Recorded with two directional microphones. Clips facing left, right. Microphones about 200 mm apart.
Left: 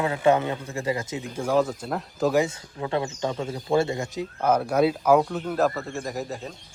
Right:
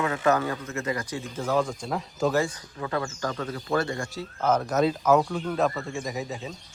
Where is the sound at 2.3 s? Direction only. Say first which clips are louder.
Left 3 dB; 20° left (ahead or behind).